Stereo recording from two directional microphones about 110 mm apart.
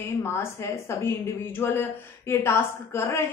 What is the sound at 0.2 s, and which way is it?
A woman's voice, 25° left (ahead or behind).